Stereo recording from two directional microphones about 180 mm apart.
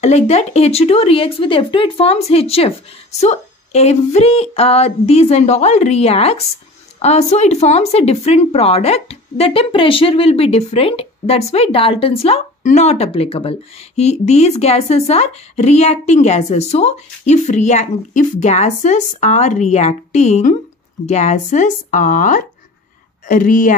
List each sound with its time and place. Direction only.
0.0 s speech: 35° left (ahead or behind)